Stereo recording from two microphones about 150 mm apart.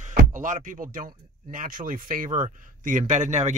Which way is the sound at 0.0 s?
55° right (ahead or behind).